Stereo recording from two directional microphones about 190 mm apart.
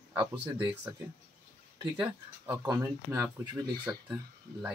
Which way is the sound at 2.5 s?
15° right (ahead or behind).